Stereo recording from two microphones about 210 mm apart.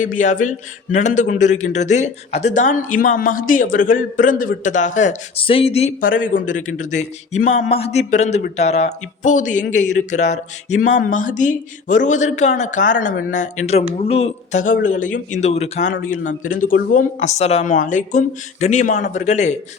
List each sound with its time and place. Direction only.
0.0 s a man's voice: 35° left (ahead or behind)
6.0 s a man's voice: 40° left (ahead or behind)